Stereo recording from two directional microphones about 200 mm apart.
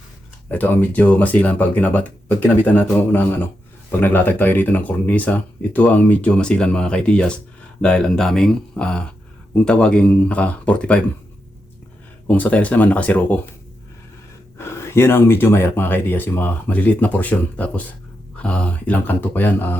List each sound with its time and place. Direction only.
0.4 s speech: 10° left (ahead or behind)
12.3 s speech: 5° left (ahead or behind)
14.6 s speech: 15° left (ahead or behind)